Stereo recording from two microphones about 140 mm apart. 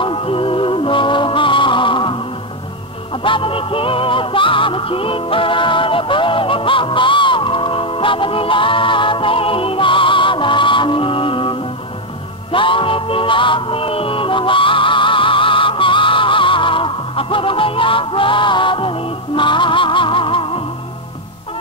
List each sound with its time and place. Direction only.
0.0 s music: 40° left (ahead or behind)
3.3 s music: 40° left (ahead or behind)
12.5 s music: 40° left (ahead or behind)